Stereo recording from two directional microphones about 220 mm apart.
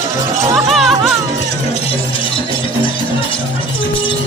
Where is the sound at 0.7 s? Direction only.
Centre (ahead or behind).